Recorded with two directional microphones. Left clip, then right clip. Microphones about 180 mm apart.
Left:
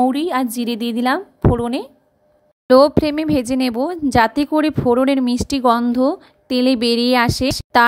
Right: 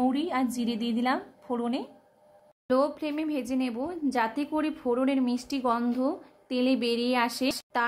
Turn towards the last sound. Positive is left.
turn(degrees=45)  # may be behind; listen again after turning